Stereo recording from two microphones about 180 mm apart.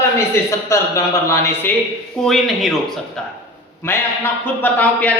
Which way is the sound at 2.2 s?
Centre (ahead or behind).